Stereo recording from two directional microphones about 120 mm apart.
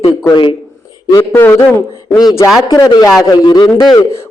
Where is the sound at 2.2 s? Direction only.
35° left (ahead or behind).